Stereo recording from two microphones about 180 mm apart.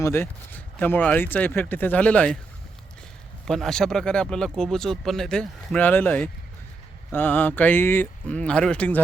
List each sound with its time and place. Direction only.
0.0 s speech: 15° left (ahead or behind)
3.4 s speech: centre (ahead or behind)